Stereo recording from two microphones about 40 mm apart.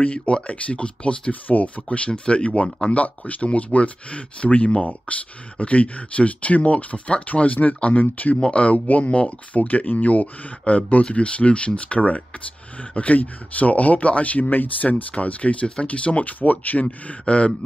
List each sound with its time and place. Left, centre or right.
0.0 s speech: left
1.3 s speech: left
1.9 s speech: left
8.4 s speech: left